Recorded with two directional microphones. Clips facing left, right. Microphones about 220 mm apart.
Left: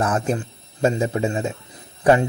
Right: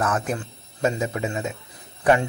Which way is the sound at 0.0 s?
30° left (ahead or behind).